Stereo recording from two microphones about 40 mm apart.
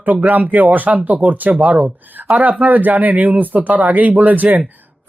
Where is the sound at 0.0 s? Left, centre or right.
Right.